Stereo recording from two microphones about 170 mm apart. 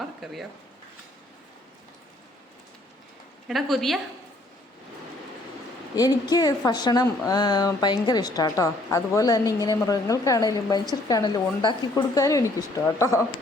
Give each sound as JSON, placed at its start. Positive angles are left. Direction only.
{"t": 0.0, "sound": "a sound", "side_deg": 0}
{"t": 3.5, "sound": "a woman's voice", "side_deg": 0}
{"t": 6.0, "sound": "speech", "side_deg": 20}